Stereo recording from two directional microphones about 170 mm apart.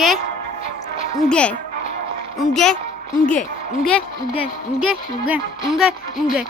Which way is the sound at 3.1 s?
50° left (ahead or behind).